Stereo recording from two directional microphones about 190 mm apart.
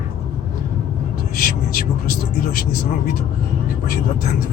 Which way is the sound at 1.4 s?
50° left (ahead or behind).